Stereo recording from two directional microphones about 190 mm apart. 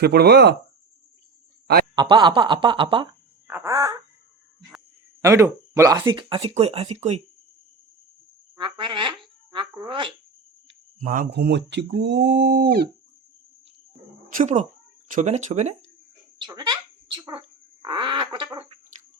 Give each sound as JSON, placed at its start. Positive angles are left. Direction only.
{"t": 0.0, "sound": "speech", "side_deg": -60}
{"t": 2.0, "sound": "speech", "side_deg": -25}
{"t": 3.4, "sound": "a sound", "side_deg": -10}
{"t": 5.2, "sound": "speech", "side_deg": -15}
{"t": 8.5, "sound": "a sound", "side_deg": -25}
{"t": 11.0, "sound": "speech", "side_deg": -45}
{"t": 14.3, "sound": "speech", "side_deg": -45}
{"t": 16.4, "sound": "a sound", "side_deg": -20}
{"t": 17.8, "sound": "bird", "side_deg": -25}